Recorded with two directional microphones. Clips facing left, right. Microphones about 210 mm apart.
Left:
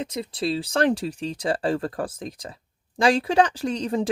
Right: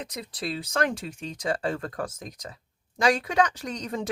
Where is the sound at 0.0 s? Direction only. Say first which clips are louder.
Left 7 dB; 25° left (ahead or behind).